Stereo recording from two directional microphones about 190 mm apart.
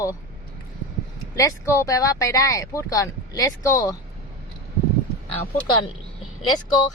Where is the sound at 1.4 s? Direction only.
15° left (ahead or behind).